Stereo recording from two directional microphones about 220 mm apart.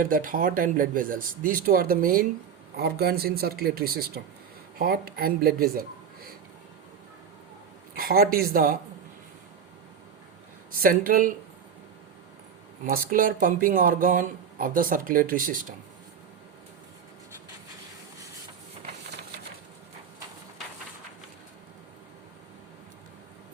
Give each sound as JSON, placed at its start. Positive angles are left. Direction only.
{"t": 0.0, "sound": "speech", "side_deg": -40}
{"t": 7.9, "sound": "speech", "side_deg": -45}
{"t": 10.7, "sound": "speech", "side_deg": -40}
{"t": 12.8, "sound": "speech", "side_deg": -40}